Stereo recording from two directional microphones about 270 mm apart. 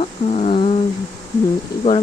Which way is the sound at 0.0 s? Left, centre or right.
Left.